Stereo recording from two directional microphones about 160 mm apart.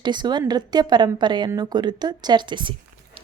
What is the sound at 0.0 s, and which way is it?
A woman's voice, 30° right (ahead or behind).